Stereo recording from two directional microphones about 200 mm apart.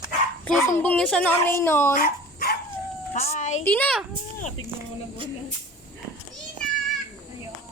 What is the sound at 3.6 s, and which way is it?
Speech, 10° left (ahead or behind).